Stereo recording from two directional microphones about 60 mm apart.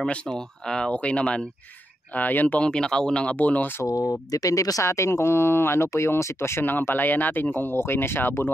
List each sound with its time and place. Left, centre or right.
0.0 s speech: centre
2.1 s speech: left
2.6 s speech: centre
3.3 s speech: left
3.8 s speech: left
6.6 s speech: left
7.7 s speech: left